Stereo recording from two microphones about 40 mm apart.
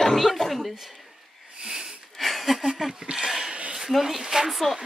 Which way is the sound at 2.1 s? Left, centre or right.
Centre.